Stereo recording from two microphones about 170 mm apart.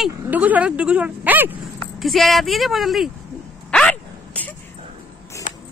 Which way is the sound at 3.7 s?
5° left (ahead or behind).